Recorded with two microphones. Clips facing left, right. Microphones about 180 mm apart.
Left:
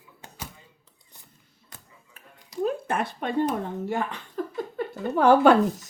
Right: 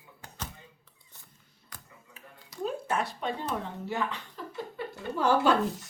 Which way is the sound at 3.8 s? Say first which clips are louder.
Left 4 dB; 50° left (ahead or behind).